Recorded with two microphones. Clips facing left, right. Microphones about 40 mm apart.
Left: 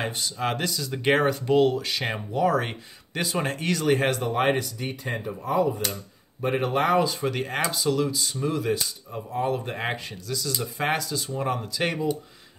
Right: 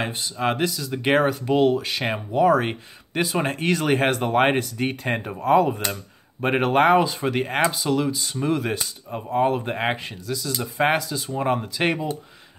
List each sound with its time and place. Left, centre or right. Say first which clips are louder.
0.0 s speech: right 3 dB; centre; by 7.1 s right
7.1 s speech: right 3 dB; right
8.5 s speech: right 2 dB; right
9.7 s speech: right 5 dB; right